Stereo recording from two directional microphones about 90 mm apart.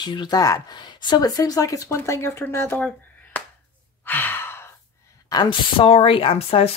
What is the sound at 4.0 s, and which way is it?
Sigh, 20° left (ahead or behind).